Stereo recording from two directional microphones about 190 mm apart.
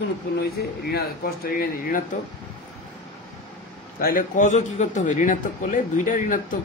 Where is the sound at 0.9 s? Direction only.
50° left (ahead or behind).